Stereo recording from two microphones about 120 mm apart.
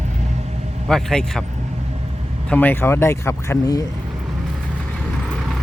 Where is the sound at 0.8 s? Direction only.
5° left (ahead or behind).